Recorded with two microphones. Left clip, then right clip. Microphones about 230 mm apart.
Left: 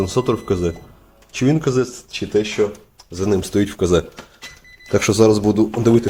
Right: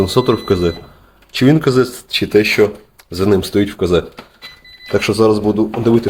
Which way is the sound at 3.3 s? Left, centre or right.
Centre.